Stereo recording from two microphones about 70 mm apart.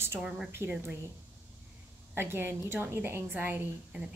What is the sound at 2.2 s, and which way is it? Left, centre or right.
A woman's voice, right.